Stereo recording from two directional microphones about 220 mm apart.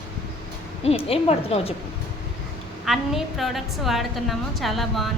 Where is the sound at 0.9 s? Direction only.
25° left (ahead or behind).